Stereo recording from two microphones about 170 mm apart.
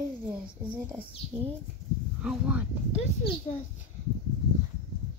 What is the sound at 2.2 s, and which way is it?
Speech, 5° right (ahead or behind).